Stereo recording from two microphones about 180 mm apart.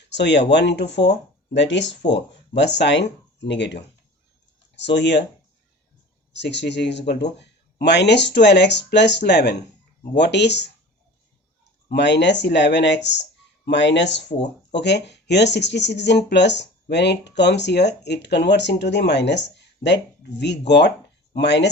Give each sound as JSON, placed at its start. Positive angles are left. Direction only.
{"t": 0.1, "sound": "speech", "side_deg": 75}
{"t": 6.3, "sound": "speech", "side_deg": 75}
{"t": 11.9, "sound": "speech", "side_deg": 75}